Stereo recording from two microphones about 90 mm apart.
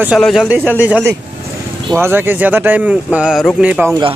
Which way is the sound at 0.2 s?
Centre (ahead or behind).